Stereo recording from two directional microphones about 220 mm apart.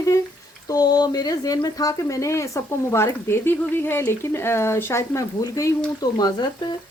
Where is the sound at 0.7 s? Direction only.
20° left (ahead or behind).